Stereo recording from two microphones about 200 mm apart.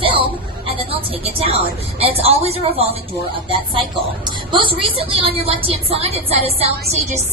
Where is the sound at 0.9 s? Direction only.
30° right (ahead or behind).